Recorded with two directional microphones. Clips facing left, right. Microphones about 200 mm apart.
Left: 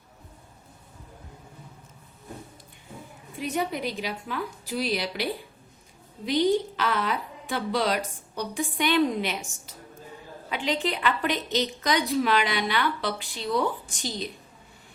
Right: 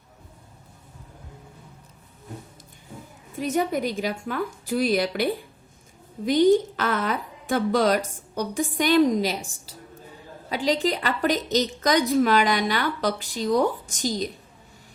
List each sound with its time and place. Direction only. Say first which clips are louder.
3.3 s a woman's voice: right 5 dB; 45° right (ahead or behind)